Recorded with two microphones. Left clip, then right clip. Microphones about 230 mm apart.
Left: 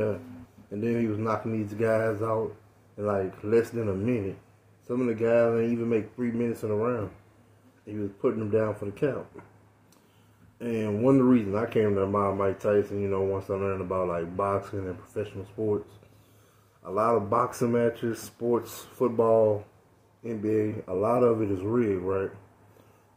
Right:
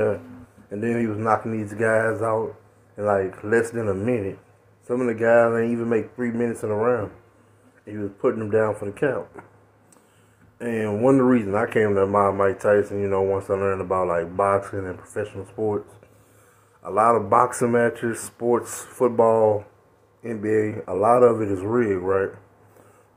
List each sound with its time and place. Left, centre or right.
0.7 s speech: centre
10.6 s speech: centre
16.9 s speech: centre